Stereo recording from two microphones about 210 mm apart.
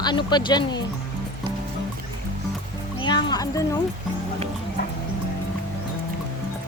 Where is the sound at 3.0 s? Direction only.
20° left (ahead or behind).